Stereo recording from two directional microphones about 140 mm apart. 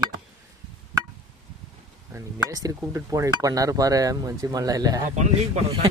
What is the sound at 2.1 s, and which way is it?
Speech, 20° right (ahead or behind).